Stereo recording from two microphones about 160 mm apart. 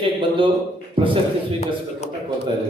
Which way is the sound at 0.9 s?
35° right (ahead or behind).